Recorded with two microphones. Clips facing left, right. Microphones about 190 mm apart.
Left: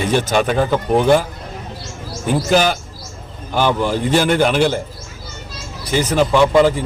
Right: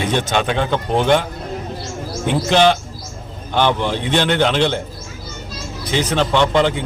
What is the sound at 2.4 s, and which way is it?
Speech, 5° left (ahead or behind).